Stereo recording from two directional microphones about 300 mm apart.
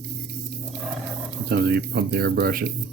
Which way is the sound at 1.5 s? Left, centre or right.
Right.